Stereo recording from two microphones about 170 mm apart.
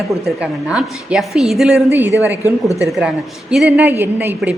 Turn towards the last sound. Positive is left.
turn(degrees=-10)  # may be behind; listen again after turning